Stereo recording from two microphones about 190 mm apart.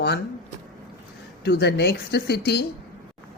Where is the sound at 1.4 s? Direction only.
60° left (ahead or behind).